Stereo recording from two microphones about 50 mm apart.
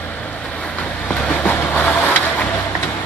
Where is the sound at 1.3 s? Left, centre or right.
Left.